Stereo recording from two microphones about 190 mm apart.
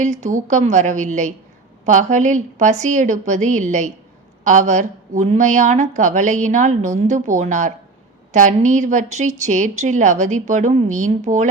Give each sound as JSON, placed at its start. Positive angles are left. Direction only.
{"t": 0.0, "sound": "a woman's voice", "side_deg": -40}